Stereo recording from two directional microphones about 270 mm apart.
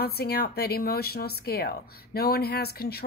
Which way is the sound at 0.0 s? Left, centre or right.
Left.